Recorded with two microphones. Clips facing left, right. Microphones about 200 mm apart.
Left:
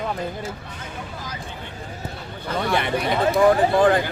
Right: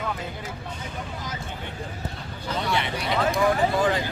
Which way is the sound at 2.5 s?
55° left (ahead or behind).